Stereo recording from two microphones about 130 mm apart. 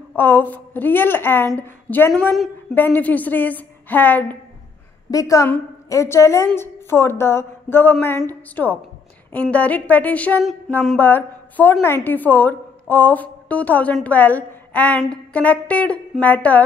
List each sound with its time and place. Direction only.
0.1 s a woman's voice: 15° left (ahead or behind)
5.1 s a woman's voice: 25° left (ahead or behind)